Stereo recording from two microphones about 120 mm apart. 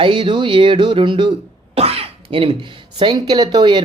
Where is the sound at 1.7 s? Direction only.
55° right (ahead or behind).